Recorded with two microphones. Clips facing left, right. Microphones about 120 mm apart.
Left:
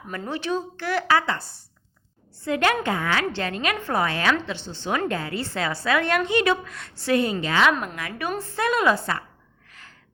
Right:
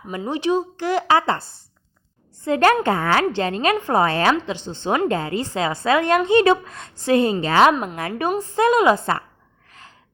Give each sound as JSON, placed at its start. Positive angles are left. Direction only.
{"t": 0.1, "sound": "a woman's voice", "side_deg": -15}
{"t": 2.7, "sound": "a woman's voice", "side_deg": -35}
{"t": 3.8, "sound": "a woman's voice", "side_deg": -20}
{"t": 4.0, "sound": "a woman's voice", "side_deg": -30}
{"t": 7.7, "sound": "a woman's voice", "side_deg": -25}
{"t": 9.6, "sound": "a sound", "side_deg": -30}